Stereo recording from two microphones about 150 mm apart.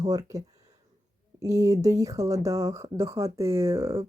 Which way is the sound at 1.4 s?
20° right (ahead or behind).